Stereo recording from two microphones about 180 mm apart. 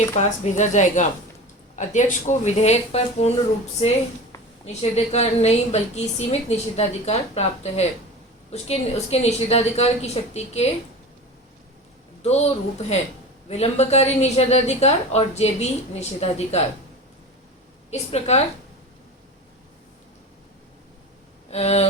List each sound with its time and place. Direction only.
0.2 s a woman's voice: 40° left (ahead or behind)
4.6 s a woman's voice: 35° left (ahead or behind)
12.2 s a woman's voice: 35° left (ahead or behind)
17.9 s a woman's voice: 35° left (ahead or behind)
21.5 s a woman's voice: 35° left (ahead or behind)